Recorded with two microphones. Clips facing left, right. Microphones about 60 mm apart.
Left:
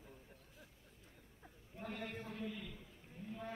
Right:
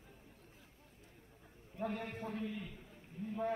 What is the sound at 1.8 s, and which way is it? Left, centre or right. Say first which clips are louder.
Speech: right 5 dB; right.